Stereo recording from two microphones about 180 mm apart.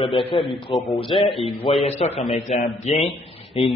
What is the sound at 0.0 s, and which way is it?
A man's voice, 30° left (ahead or behind).